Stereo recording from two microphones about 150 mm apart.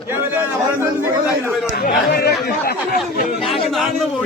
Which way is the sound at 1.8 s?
90° left.